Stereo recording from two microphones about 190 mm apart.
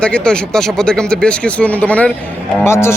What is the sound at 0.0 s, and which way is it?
A man's voice, 5° left (ahead or behind).